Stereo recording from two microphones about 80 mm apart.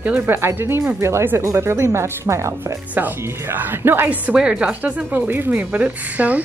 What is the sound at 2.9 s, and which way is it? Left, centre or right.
Speech, right.